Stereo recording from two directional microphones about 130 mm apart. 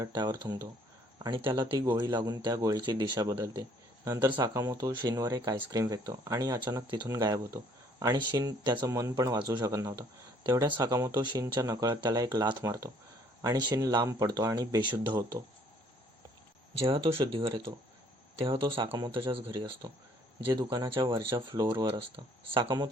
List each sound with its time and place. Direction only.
0.0 s speech: 35° right (ahead or behind)
8.9 s speech: 25° right (ahead or behind)
16.7 s speech: 45° right (ahead or behind)
20.5 s speech: 35° right (ahead or behind)
21.0 s speech: 40° right (ahead or behind)